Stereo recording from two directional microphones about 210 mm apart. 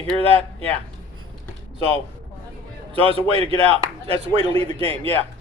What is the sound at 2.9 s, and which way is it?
A man's voice, 25° right (ahead or behind).